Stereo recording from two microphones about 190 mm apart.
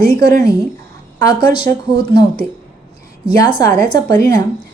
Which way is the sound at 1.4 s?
25° left (ahead or behind).